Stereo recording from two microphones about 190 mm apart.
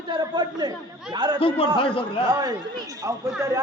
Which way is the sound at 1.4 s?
30° left (ahead or behind).